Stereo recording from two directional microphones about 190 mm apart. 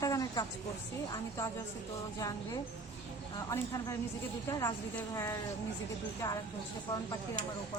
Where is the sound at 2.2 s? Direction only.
20° left (ahead or behind).